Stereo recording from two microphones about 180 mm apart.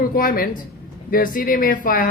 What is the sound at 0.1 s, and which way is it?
Speech, 50° left (ahead or behind).